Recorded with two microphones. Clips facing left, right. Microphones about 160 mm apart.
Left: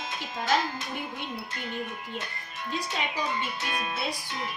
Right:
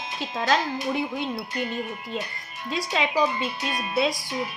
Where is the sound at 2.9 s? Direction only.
90° right.